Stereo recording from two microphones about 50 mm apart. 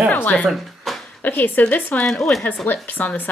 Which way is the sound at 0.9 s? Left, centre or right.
Centre.